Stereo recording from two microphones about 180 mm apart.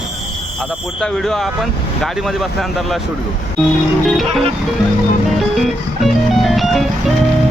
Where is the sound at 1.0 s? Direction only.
5° left (ahead or behind).